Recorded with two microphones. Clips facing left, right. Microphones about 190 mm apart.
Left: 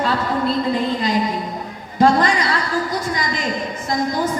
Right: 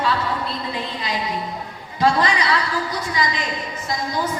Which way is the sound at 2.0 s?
45° left (ahead or behind).